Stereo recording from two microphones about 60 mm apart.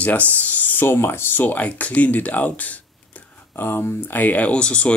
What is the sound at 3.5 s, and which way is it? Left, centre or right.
Speech, left.